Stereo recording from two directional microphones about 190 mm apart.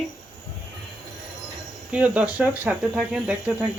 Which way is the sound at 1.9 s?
5° right (ahead or behind).